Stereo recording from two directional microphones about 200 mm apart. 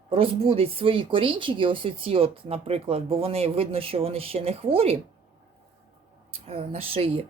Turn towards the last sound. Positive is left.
turn(degrees=-30)  # may be behind; listen again after turning